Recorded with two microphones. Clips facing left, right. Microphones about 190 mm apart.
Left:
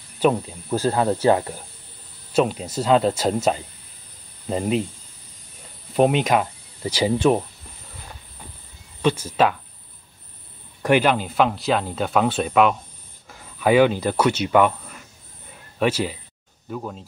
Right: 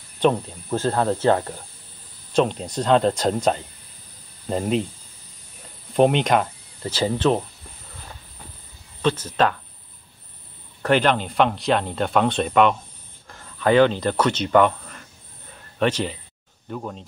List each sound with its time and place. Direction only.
0.2 s speech: 5° left (ahead or behind)
5.9 s speech: 5° left (ahead or behind)
9.0 s speech: 10° left (ahead or behind)
10.8 s speech: 10° left (ahead or behind)